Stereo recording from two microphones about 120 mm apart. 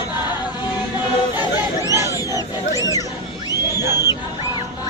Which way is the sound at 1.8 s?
30° left (ahead or behind).